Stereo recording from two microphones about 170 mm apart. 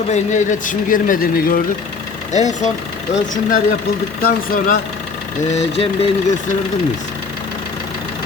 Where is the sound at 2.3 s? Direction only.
45° left (ahead or behind).